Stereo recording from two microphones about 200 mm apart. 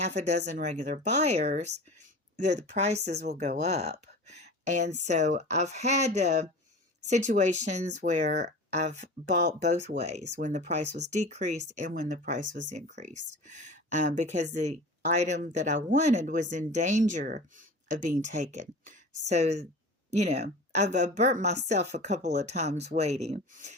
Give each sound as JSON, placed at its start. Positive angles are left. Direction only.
{"t": 0.6, "sound": "speech", "side_deg": -35}